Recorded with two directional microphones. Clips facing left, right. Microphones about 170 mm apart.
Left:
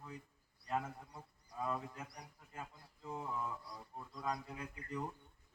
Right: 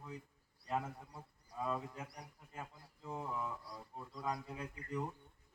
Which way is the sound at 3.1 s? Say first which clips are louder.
Even; 5° right (ahead or behind).